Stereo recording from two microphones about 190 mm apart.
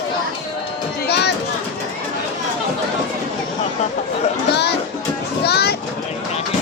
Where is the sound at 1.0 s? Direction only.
60° left (ahead or behind).